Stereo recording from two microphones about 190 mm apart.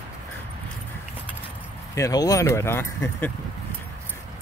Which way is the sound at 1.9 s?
20° left (ahead or behind).